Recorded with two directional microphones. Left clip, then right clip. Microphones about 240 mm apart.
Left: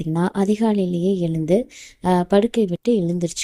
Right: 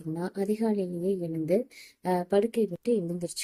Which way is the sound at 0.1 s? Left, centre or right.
Left.